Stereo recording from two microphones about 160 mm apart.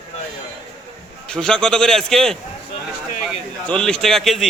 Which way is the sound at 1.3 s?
5° left (ahead or behind).